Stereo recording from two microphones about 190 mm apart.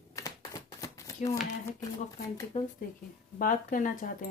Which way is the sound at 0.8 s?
15° left (ahead or behind).